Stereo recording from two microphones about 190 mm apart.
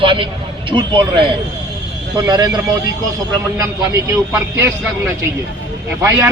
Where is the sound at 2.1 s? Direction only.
20° right (ahead or behind).